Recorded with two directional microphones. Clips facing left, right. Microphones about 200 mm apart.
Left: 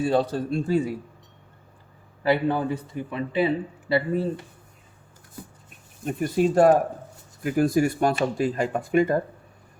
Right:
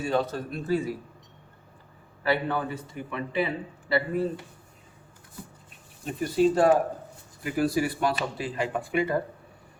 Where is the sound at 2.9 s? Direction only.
40° left (ahead or behind).